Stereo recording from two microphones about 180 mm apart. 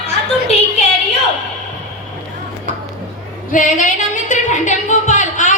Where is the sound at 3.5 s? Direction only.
45° left (ahead or behind).